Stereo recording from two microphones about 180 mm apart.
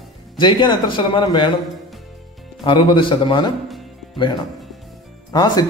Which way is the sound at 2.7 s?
25° left (ahead or behind).